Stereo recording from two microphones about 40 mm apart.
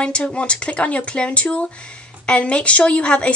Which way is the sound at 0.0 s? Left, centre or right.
Left.